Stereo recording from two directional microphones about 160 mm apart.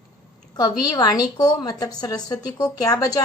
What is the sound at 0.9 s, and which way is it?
A woman's voice, 25° left (ahead or behind).